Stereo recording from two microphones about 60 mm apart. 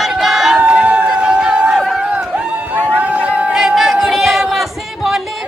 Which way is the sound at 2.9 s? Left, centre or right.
Right.